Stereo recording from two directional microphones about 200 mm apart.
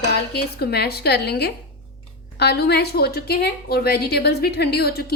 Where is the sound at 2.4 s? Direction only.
55° left (ahead or behind).